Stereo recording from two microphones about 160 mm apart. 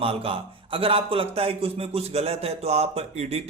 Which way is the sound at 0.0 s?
35° right (ahead or behind).